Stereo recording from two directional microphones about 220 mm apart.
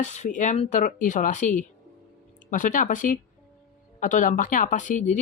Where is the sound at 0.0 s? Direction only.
30° left (ahead or behind).